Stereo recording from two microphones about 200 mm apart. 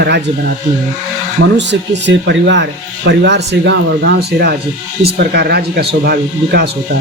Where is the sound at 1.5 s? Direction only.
60° right (ahead or behind).